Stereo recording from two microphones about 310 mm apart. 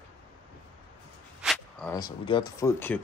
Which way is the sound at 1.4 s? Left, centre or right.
Centre.